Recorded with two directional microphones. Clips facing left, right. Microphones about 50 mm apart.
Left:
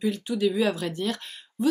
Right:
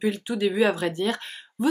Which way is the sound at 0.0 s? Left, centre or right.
Centre.